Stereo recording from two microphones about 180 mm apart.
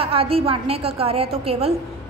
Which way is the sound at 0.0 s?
30° right (ahead or behind).